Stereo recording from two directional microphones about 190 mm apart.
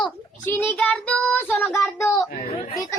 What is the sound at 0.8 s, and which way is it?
Child singing, 5° left (ahead or behind).